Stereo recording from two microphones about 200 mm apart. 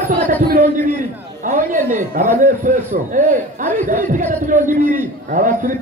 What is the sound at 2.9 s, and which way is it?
A man's voice, 40° right (ahead or behind).